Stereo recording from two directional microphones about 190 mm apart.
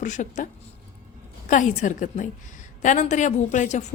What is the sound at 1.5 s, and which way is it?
A woman's voice, 40° left (ahead or behind).